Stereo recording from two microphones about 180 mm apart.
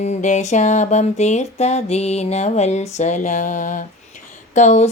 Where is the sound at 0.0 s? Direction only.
40° left (ahead or behind).